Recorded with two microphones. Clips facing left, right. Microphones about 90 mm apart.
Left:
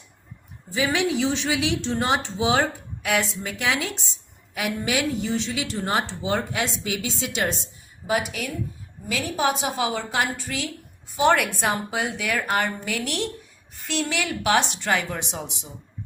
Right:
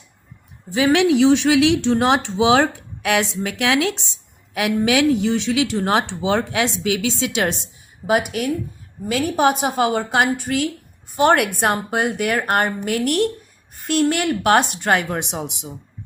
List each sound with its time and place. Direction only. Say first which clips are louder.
0.7 s a woman's voice: right 8 dB; 65° right (ahead or behind)
4.5 s a woman's voice: right 7 dB; 90° right; by 15.5 s 60° right (ahead or behind)